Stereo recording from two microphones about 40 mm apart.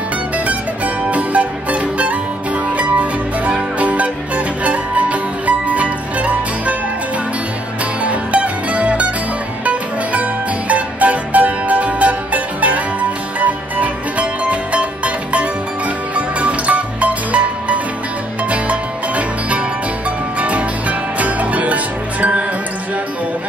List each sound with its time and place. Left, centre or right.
0.5 s music: right
8.0 s music: right
10.7 s music: right